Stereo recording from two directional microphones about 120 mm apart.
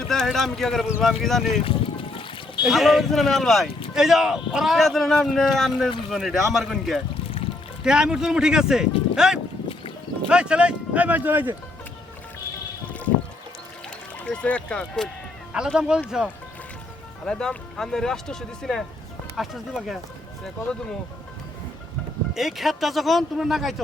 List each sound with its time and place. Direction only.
0.1 s speech: 5° left (ahead or behind)
1.6 s music: 50° left (ahead or behind)
2.6 s speech: centre (ahead or behind)
14.3 s speech: 10° left (ahead or behind)
15.5 s speech: 5° right (ahead or behind)
17.2 s speech: 5° left (ahead or behind)
22.4 s speech: centre (ahead or behind)